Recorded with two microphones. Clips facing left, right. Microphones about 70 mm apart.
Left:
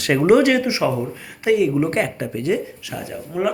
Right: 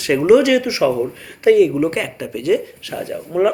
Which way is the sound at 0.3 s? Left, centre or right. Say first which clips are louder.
Right 3 dB; left.